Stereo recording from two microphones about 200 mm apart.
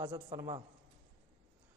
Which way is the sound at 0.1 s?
25° right (ahead or behind).